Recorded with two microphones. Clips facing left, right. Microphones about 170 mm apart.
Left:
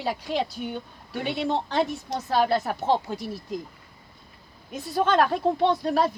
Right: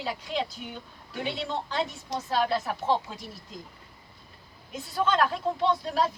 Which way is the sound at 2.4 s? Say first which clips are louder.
Left 4 dB; 60° left (ahead or behind).